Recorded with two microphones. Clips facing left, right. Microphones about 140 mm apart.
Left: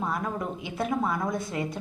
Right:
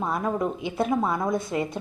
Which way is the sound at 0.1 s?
25° right (ahead or behind).